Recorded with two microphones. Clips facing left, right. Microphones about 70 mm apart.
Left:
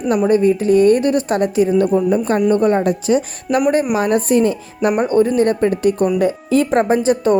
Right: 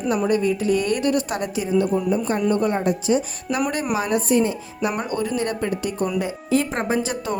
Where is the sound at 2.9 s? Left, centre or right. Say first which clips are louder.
Left 4 dB; left.